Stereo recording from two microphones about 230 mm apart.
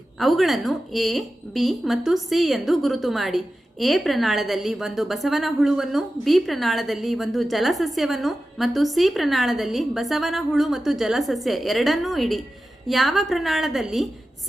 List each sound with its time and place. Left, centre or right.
0.2 s speech: centre